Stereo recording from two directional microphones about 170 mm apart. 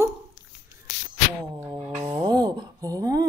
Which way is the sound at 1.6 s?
20° right (ahead or behind).